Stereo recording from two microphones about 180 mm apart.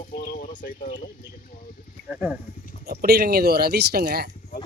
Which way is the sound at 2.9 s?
60° right (ahead or behind).